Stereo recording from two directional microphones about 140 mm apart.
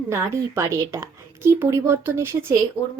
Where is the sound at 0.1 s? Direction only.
20° right (ahead or behind).